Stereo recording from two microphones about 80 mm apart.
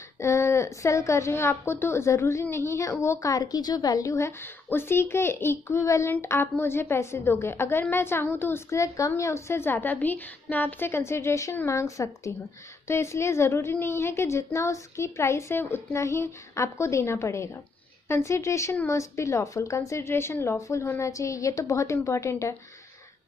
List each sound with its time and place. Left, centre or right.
0.2 s a woman's voice: left